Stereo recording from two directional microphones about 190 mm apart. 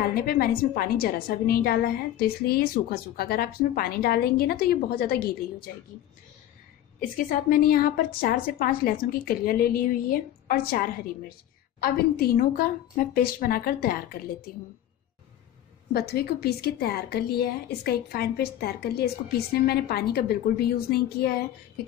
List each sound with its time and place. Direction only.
0.1 s a woman's voice: 50° left (ahead or behind)
7.0 s a woman's voice: 45° left (ahead or behind)
15.9 s a woman's voice: 55° left (ahead or behind)